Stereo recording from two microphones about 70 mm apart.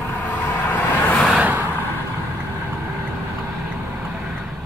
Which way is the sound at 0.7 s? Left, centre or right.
Left.